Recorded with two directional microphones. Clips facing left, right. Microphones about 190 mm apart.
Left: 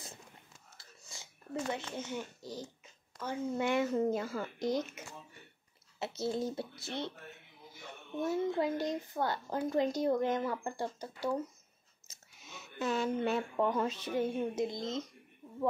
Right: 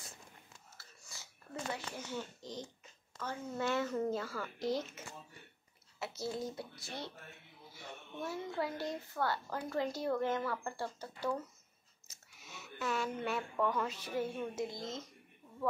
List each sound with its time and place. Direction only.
0.7 s whispering: 15° left (ahead or behind)
3.2 s a woman's voice: 15° left (ahead or behind)
8.2 s a woman's voice: 20° left (ahead or behind)
12.1 s a sound: 20° left (ahead or behind)
12.7 s a woman's voice: 25° left (ahead or behind)